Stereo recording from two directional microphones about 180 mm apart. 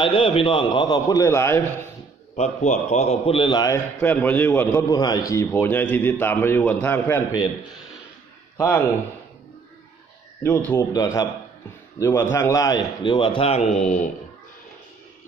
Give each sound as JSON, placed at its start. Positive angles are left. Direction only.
{"t": 0.0, "sound": "a man's voice", "side_deg": 30}
{"t": 2.3, "sound": "a man's voice", "side_deg": 40}
{"t": 8.5, "sound": "a man's voice", "side_deg": 15}
{"t": 10.4, "sound": "a man's voice", "side_deg": 10}
{"t": 13.8, "sound": "speech", "side_deg": 40}